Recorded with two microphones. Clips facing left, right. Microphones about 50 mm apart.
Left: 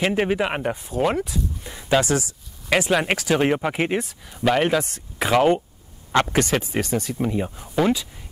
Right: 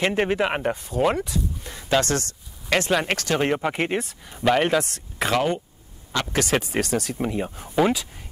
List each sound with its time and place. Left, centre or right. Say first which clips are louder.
0.0 s speech: left 1 dB; centre
7.2 s speech: left 2 dB; centre